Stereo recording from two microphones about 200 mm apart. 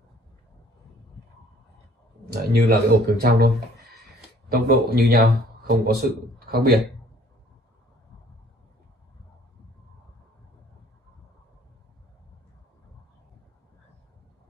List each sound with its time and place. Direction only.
2.5 s speech: 50° right (ahead or behind)